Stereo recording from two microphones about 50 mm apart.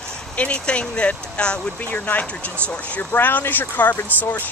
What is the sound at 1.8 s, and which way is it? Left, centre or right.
Speech, left.